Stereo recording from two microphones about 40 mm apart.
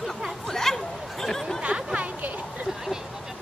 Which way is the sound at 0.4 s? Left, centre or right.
Centre.